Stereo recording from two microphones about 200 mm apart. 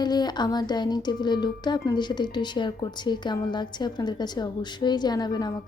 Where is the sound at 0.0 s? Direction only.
20° left (ahead or behind).